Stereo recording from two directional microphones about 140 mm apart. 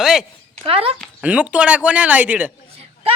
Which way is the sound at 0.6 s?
40° right (ahead or behind).